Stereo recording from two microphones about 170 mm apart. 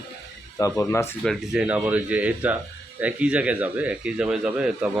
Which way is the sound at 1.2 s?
Centre (ahead or behind).